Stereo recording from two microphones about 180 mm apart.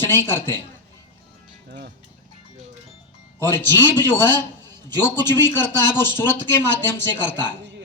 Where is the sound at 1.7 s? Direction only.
65° right (ahead or behind).